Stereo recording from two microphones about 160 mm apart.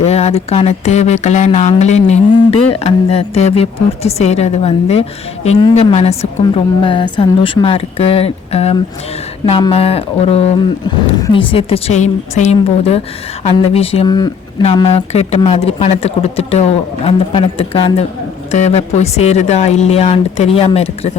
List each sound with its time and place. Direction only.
0.0 s speech: 40° left (ahead or behind)
1.8 s music: 45° left (ahead or behind)
18.5 s speech: 45° left (ahead or behind)